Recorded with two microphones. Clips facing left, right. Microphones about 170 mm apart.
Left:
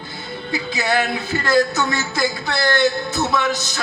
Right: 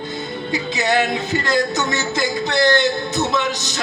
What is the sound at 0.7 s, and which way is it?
Speech, 20° right (ahead or behind).